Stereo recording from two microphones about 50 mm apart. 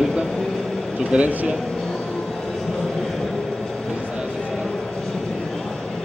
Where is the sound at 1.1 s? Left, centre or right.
Right.